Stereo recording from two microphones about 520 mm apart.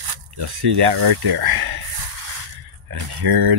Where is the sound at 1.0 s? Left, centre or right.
Right.